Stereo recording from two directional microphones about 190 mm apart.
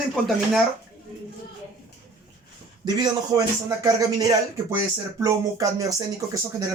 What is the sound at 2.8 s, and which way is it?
Speech, 20° right (ahead or behind).